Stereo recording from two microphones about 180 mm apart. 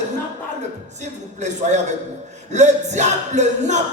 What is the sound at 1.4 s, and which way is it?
Music, 40° right (ahead or behind).